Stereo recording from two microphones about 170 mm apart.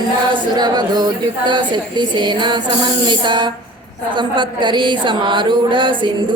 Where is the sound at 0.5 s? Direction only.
25° right (ahead or behind).